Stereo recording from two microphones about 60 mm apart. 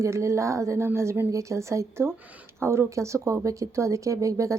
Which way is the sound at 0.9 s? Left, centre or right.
Right.